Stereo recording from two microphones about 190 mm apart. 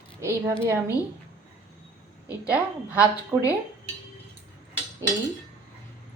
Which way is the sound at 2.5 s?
10° right (ahead or behind).